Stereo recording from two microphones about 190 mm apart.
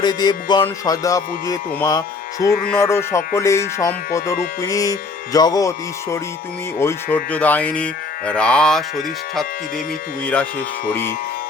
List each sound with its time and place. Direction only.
0.0 s music: 20° left (ahead or behind); by 8.8 s 5° left (ahead or behind)